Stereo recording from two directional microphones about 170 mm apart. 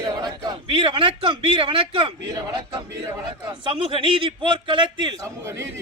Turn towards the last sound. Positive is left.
turn(degrees=-15)  # may be behind; listen again after turning